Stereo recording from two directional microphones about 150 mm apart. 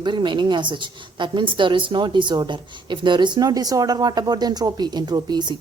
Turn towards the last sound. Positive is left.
turn(degrees=-30)  # may be behind; listen again after turning